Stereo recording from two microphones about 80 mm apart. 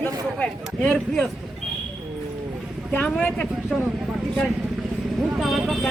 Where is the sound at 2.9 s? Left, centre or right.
Left.